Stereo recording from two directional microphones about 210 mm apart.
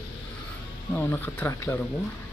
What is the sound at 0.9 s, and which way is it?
Speech, 10° left (ahead or behind).